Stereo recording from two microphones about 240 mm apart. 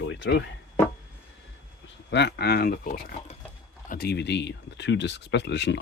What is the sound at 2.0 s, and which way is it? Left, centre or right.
Speech, left.